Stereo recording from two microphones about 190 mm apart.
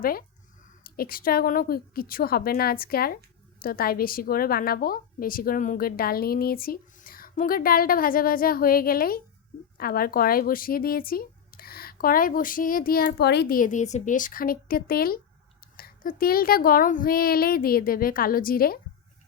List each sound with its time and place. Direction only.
0.0 s a woman's voice: 50° left (ahead or behind)